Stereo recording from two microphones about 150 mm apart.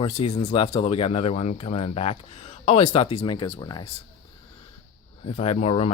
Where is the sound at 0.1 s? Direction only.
40° left (ahead or behind).